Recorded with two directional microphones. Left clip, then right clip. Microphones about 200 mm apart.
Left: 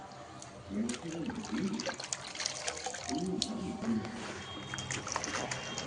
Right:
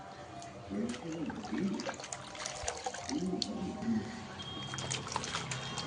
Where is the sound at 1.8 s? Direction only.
5° left (ahead or behind).